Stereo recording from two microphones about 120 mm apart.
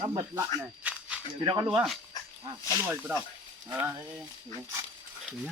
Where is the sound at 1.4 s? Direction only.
40° right (ahead or behind).